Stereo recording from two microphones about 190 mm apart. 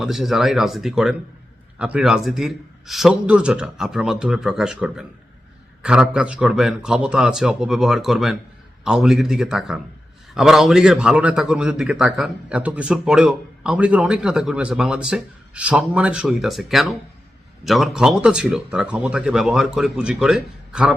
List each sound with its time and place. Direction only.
0.0 s a man's voice: centre (ahead or behind)